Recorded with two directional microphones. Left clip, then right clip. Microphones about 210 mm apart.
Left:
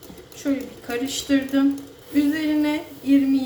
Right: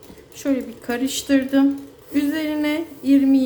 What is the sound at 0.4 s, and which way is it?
Speech, 45° right (ahead or behind).